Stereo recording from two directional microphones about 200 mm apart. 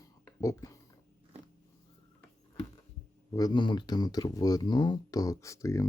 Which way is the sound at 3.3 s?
20° left (ahead or behind).